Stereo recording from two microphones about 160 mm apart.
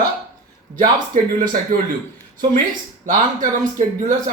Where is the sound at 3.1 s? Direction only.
55° right (ahead or behind).